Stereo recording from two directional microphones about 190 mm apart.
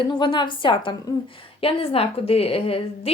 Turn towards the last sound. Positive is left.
turn(degrees=30)  # may be behind; listen again after turning